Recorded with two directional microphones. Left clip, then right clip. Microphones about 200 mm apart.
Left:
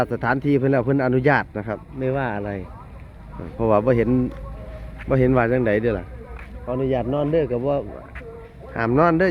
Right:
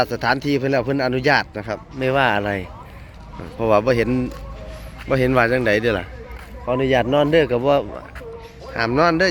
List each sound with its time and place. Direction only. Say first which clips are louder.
0.0 s speech: right 2 dB; 10° left (ahead or behind)
2.0 s speech: right 7 dB; 5° right (ahead or behind)
3.6 s speech: right 2 dB; 10° left (ahead or behind)
6.7 s a man's voice: right 5 dB; 15° right (ahead or behind)
8.7 s speech: right 1 dB; 10° left (ahead or behind)